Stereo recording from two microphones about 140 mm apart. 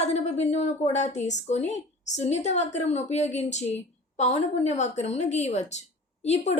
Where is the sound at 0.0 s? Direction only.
50° left (ahead or behind).